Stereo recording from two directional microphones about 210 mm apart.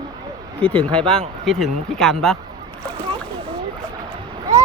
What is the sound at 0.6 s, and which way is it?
Speech, 5° left (ahead or behind).